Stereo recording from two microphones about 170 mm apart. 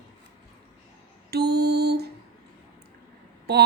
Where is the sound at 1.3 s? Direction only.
70° right (ahead or behind).